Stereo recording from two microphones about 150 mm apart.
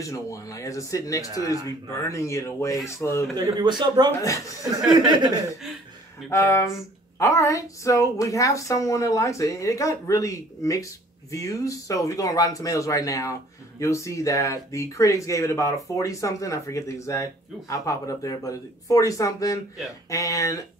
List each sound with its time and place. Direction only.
0.0 s speech: 20° left (ahead or behind)
3.3 s a man's voice: 30° right (ahead or behind)
6.3 s speech: 20° left (ahead or behind)